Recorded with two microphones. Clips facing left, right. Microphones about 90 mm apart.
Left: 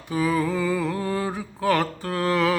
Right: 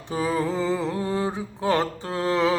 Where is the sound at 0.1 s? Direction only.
30° right (ahead or behind).